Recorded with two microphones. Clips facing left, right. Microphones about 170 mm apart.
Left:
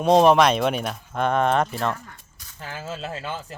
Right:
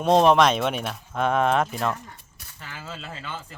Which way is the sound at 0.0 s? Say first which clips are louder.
Left 2 dB; centre (ahead or behind).